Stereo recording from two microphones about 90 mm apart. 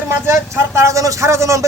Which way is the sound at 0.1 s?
30° right (ahead or behind).